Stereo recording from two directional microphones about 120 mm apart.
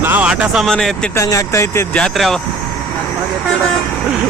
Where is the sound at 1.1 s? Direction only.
25° left (ahead or behind).